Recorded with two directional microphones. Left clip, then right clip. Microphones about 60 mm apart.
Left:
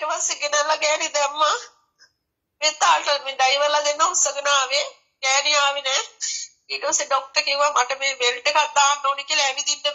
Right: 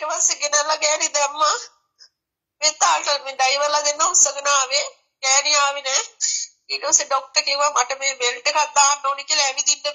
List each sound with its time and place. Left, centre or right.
0.0 s telephone: right
2.6 s a woman's voice: right